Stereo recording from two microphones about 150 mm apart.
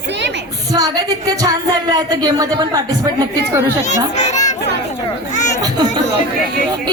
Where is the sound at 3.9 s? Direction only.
50° left (ahead or behind).